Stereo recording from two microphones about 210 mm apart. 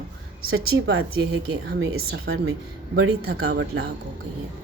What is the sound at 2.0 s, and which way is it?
Speech, 75° right (ahead or behind).